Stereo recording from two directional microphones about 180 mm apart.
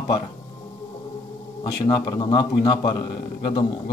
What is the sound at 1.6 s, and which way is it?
Speech, 20° left (ahead or behind).